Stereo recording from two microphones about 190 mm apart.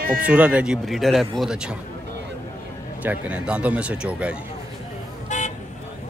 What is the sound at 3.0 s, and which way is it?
Speech, 10° right (ahead or behind).